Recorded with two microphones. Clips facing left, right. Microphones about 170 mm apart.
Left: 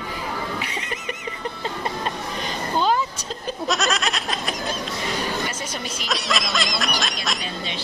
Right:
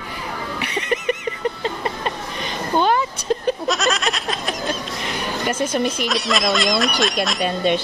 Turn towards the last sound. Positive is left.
turn(degrees=-55)  # may be behind; listen again after turning